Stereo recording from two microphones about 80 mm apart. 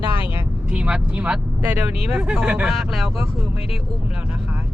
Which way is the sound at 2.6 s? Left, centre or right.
Centre.